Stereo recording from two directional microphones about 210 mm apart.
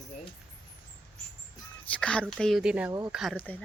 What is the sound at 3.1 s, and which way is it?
Speech, 5° left (ahead or behind).